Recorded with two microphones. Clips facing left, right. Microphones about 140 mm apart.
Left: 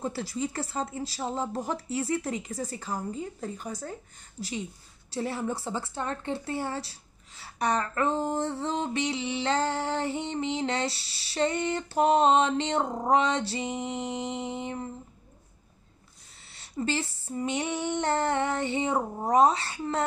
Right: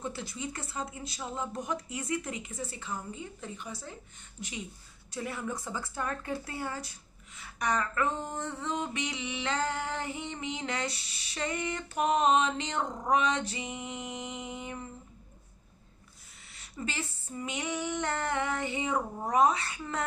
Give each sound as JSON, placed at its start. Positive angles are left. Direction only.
{"t": 0.0, "sound": "a woman's voice", "side_deg": 35}
{"t": 16.5, "sound": "a woman's voice", "side_deg": 30}